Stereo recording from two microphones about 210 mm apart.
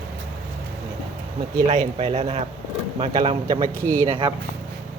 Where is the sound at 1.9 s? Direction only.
30° right (ahead or behind).